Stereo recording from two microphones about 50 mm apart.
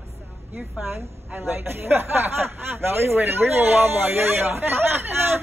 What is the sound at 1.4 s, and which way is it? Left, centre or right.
Speech, right.